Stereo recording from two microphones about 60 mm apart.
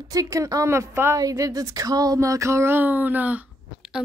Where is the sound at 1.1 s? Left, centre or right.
Right.